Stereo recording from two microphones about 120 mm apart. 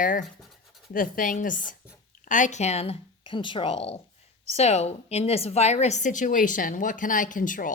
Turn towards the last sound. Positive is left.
turn(degrees=90)